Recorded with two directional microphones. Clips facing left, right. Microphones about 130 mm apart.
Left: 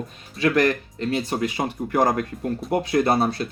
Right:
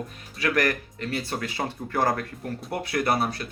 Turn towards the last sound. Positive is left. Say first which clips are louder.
# left 5 dB
turn(degrees=25)  # may be behind; listen again after turning